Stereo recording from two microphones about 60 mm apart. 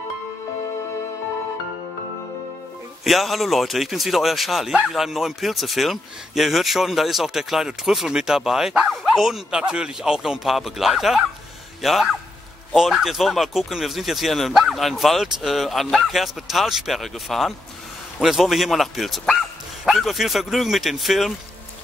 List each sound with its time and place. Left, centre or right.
3.0 s a man's voice: centre
9.6 s a man's voice: centre